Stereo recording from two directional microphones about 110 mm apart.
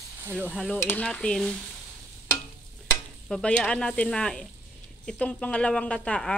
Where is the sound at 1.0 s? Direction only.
5° left (ahead or behind).